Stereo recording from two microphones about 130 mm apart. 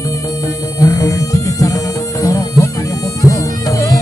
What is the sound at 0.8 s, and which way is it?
Music, 25° left (ahead or behind).